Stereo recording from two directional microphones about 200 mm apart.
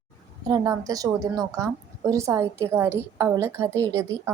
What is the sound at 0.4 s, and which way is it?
A woman's voice, 20° right (ahead or behind).